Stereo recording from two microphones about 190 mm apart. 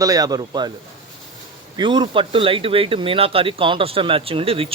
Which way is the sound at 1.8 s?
25° right (ahead or behind).